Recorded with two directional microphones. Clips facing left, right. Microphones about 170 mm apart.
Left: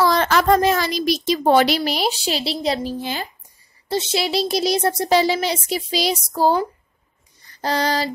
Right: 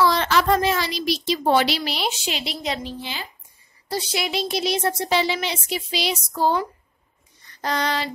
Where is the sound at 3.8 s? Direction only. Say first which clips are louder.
Left 4 dB; 25° left (ahead or behind).